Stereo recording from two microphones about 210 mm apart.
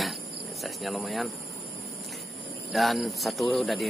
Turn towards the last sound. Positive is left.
turn(degrees=0)  # may be behind; listen again after turning